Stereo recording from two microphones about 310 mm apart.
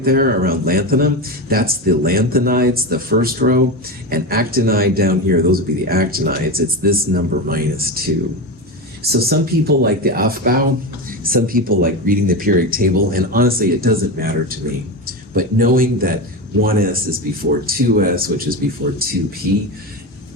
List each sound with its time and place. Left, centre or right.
0.0 s a man's voice: right
9.1 s a man's voice: right